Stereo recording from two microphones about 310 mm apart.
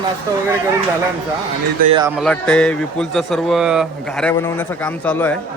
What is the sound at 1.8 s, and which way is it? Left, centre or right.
Speech, centre.